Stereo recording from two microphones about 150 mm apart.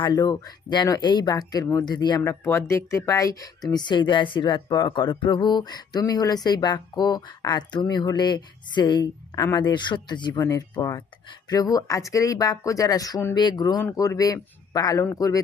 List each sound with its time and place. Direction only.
0.0 s speech: 25° left (ahead or behind)